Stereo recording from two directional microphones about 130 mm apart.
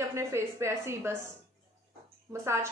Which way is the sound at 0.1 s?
20° right (ahead or behind).